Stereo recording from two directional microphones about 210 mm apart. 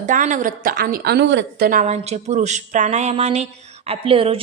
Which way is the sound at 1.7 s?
35° right (ahead or behind).